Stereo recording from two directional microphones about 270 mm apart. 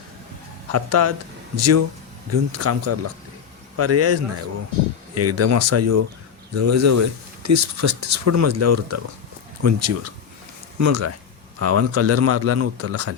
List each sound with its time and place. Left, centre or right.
0.7 s speech: right
11.6 s speech: right